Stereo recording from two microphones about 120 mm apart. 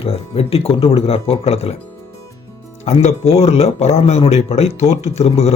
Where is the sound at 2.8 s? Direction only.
65° left (ahead or behind).